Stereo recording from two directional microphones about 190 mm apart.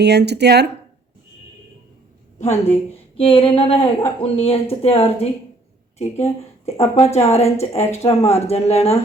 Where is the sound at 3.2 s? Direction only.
30° left (ahead or behind).